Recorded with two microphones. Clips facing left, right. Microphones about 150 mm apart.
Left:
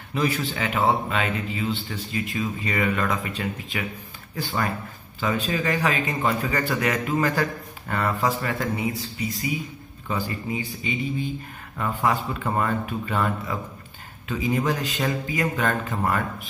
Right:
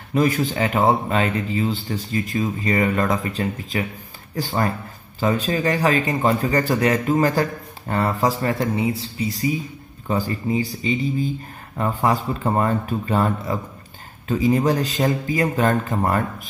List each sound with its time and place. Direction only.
0.1 s a man's voice: 45° right (ahead or behind)